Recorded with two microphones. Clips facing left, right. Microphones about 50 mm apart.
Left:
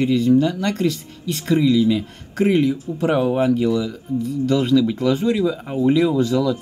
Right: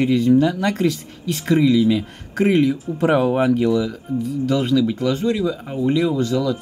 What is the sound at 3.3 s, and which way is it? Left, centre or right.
Speech, centre.